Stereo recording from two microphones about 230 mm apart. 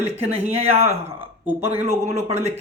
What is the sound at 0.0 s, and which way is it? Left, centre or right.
Speech, right.